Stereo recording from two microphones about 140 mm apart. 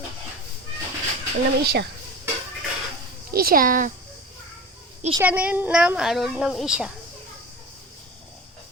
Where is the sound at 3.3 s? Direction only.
90° right.